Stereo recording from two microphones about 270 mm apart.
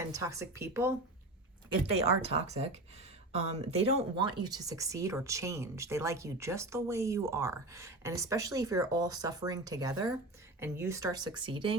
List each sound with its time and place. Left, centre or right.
0.1 s speech: centre
2.0 s speech: right